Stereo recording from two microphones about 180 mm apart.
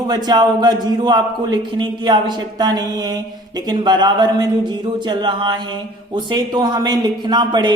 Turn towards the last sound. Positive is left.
turn(degrees=-25)  # may be behind; listen again after turning